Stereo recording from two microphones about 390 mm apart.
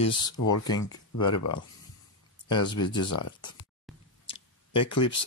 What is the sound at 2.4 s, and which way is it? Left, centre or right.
Speech, centre.